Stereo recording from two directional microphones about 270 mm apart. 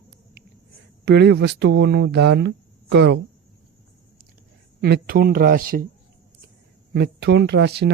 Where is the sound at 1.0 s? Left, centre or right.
Right.